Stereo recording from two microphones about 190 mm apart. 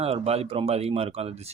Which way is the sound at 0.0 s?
30° right (ahead or behind).